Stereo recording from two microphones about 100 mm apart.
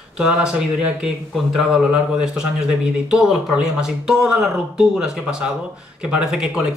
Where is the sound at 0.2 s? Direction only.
10° right (ahead or behind).